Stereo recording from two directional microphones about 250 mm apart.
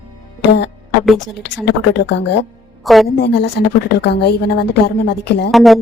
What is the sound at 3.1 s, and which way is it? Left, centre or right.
A woman's voice, left.